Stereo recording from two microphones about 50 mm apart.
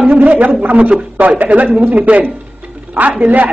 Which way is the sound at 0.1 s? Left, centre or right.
Right.